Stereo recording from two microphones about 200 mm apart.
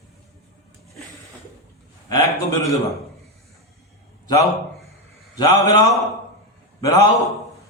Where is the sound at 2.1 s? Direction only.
15° left (ahead or behind).